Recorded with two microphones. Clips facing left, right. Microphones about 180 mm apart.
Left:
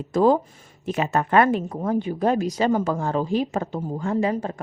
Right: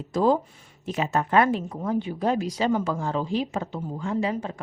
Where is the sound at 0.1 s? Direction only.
55° left (ahead or behind).